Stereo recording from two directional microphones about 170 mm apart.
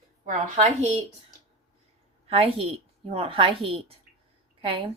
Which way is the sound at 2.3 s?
35° right (ahead or behind).